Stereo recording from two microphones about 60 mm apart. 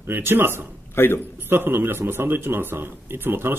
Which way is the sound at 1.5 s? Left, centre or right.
Right.